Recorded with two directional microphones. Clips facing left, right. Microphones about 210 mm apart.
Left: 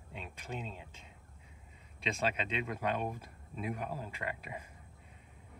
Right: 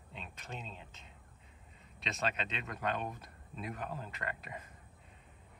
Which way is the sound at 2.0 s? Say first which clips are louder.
Left 3 dB; 10° left (ahead or behind).